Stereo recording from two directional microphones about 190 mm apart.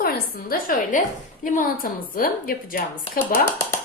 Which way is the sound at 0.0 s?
50° left (ahead or behind).